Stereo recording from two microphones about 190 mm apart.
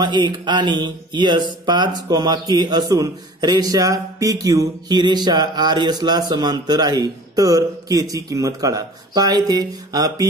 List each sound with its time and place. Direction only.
0.0 s speech: 25° right (ahead or behind)